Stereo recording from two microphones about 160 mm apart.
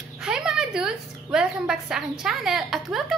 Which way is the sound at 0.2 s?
5° right (ahead or behind).